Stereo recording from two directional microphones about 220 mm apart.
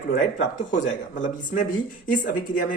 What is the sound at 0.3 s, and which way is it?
Speech, 35° left (ahead or behind).